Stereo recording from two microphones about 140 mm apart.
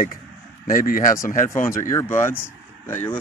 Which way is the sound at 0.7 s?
85° left.